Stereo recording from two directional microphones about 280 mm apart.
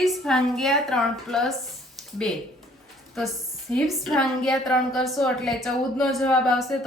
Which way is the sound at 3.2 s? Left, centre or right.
Centre.